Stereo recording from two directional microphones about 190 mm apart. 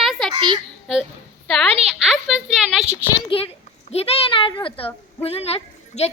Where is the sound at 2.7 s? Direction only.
5° right (ahead or behind).